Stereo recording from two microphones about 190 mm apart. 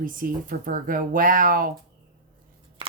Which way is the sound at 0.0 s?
45° right (ahead or behind).